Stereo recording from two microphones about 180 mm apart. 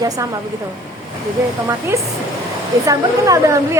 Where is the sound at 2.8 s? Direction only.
20° right (ahead or behind).